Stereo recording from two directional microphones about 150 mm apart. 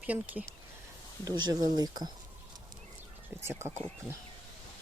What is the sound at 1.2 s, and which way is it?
Speech, 25° right (ahead or behind).